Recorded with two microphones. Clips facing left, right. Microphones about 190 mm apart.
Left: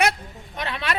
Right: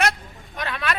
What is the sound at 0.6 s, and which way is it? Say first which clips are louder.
Speech: right 1 dB; 25° left (ahead or behind).